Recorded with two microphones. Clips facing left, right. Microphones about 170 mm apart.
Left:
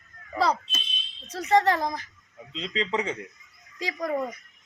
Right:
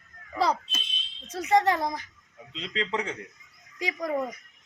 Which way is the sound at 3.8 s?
15° right (ahead or behind).